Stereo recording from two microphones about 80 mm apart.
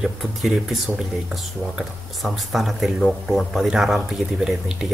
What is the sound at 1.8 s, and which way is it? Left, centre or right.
Speech, centre.